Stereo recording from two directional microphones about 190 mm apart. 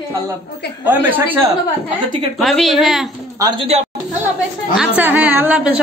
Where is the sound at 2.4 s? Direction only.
Centre (ahead or behind).